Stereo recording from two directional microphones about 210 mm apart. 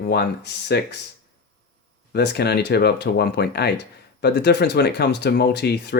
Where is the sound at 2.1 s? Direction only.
50° left (ahead or behind).